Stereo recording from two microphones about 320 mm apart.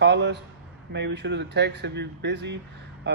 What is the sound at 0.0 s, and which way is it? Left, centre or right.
Speech, right.